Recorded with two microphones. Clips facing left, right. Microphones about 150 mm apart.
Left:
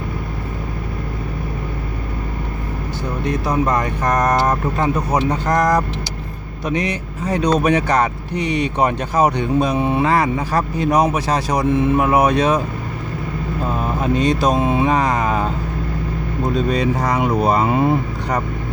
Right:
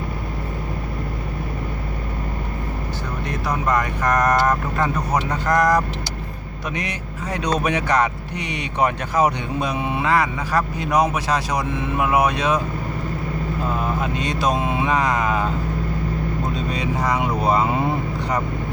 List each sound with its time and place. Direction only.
3.2 s speech: 25° left (ahead or behind)
6.7 s speech: 30° left (ahead or behind)
14.0 s speech: 35° left (ahead or behind)
16.8 s speech: 45° left (ahead or behind)